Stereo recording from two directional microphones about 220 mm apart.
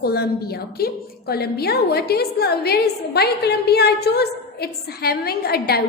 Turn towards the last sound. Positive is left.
turn(degrees=45)  # may be behind; listen again after turning